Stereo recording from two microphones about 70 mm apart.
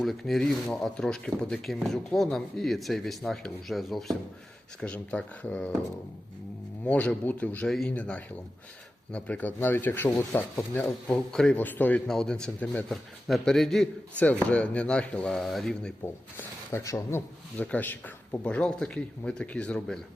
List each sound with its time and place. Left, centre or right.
0.0 s speech: centre
4.8 s speech: centre
6.8 s speech: centre
11.1 s speech: centre
11.5 s speech: left
12.0 s speech: centre
14.2 s speech: left
15.4 s speech: centre
16.8 s speech: left
17.6 s speech: left
18.4 s speech: centre